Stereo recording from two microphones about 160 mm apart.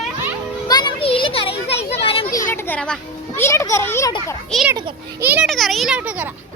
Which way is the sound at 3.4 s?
20° left (ahead or behind).